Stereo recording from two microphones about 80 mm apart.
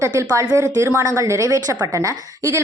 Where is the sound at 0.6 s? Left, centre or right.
Right.